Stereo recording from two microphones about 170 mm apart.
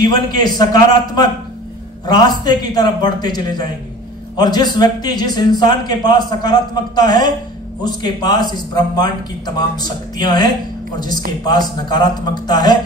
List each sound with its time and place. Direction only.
0.1 s a man's voice: 25° left (ahead or behind)
2.4 s a man's voice: 25° left (ahead or behind)